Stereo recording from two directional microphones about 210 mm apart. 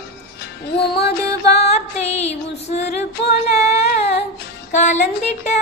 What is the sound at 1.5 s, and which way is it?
Music, 30° left (ahead or behind).